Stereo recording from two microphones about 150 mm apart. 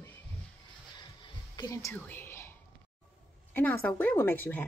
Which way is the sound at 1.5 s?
25° left (ahead or behind).